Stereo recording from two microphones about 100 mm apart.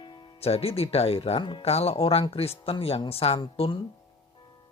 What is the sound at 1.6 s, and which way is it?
Speech, 85° left.